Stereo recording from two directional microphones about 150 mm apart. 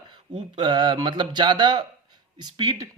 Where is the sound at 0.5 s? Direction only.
30° right (ahead or behind).